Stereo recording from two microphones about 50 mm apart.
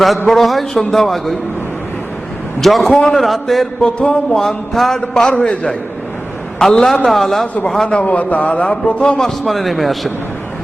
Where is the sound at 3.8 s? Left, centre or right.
Left.